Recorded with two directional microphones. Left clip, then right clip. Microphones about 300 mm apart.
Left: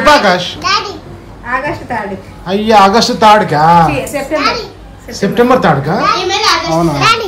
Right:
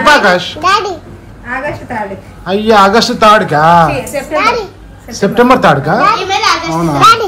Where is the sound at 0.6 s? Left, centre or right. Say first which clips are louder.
Right 3 dB; centre.